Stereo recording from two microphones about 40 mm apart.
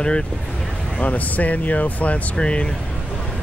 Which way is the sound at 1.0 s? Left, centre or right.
Left.